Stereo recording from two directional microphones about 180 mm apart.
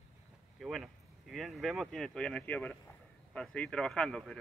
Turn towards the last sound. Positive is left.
turn(degrees=5)  # may be behind; listen again after turning